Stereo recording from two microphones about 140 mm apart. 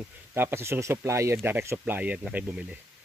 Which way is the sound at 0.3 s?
15° right (ahead or behind).